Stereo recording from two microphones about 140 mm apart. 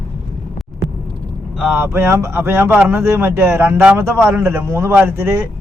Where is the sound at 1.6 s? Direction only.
10° right (ahead or behind).